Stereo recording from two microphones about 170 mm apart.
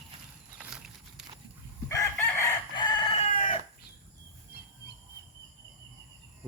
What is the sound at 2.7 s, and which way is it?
Crowing, 25° left (ahead or behind).